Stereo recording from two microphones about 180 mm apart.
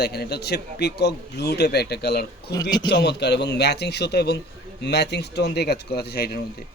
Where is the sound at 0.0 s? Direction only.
65° left (ahead or behind).